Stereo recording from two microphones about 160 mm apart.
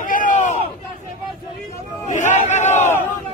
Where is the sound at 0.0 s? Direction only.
55° left (ahead or behind).